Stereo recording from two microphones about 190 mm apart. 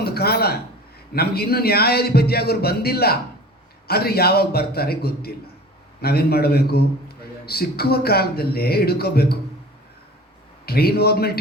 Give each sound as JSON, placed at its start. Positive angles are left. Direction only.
{"t": 0.0, "sound": "a sound", "side_deg": 55}
{"t": 1.1, "sound": "a man's voice", "side_deg": 55}
{"t": 10.7, "sound": "a man's voice", "side_deg": 55}